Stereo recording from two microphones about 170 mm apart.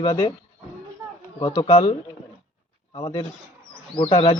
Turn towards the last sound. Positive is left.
turn(degrees=30)  # may be behind; listen again after turning